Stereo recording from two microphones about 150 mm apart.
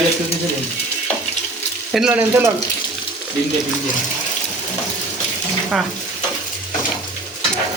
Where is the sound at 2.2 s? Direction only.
15° right (ahead or behind).